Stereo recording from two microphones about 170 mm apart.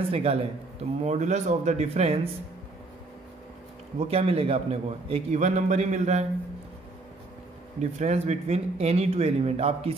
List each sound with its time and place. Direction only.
0.1 s a man's voice: 35° right (ahead or behind)
4.0 s a man's voice: 35° right (ahead or behind)
7.8 s a man's voice: 40° right (ahead or behind)